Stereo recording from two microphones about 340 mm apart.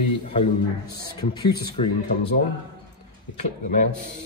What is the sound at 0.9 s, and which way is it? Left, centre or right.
Speech, centre.